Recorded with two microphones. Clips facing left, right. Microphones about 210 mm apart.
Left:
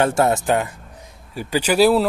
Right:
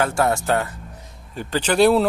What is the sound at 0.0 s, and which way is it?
Speech, 25° left (ahead or behind).